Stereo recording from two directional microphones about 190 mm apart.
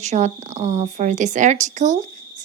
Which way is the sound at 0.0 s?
35° right (ahead or behind).